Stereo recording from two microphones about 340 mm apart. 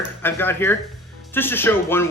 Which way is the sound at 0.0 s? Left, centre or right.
Centre.